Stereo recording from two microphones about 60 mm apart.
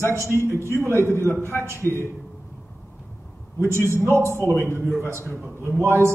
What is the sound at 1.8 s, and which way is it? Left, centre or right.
Speech, left.